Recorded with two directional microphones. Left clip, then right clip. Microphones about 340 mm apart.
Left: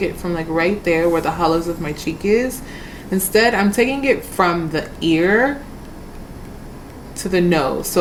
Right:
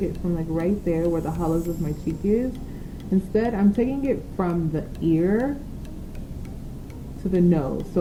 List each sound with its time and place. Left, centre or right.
0.0 s a woman's voice: centre
7.3 s a woman's voice: centre